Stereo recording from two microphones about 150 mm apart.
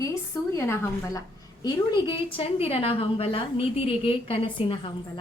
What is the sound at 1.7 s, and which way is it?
A woman's voice, 30° left (ahead or behind).